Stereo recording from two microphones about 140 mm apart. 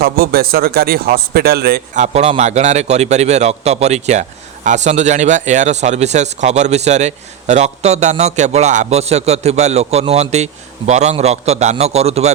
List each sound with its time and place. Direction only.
0.0 s speech: 90° right
2.1 s a man's voice: 50° right (ahead or behind)